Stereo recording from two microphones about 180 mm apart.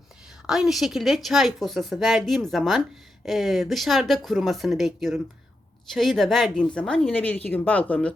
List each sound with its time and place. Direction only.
0.4 s speech: 5° right (ahead or behind)